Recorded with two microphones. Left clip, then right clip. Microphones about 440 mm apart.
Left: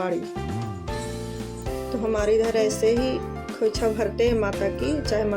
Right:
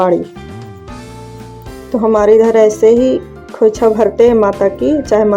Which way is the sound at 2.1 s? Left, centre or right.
Left.